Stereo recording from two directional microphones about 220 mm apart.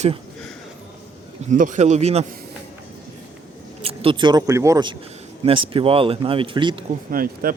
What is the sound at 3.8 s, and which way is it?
Speech, 25° right (ahead or behind).